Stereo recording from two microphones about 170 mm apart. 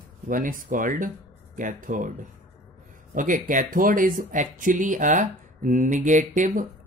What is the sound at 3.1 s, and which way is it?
Speech, 50° right (ahead or behind).